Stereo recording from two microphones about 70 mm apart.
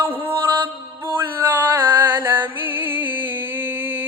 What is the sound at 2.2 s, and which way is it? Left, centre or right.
Music, right.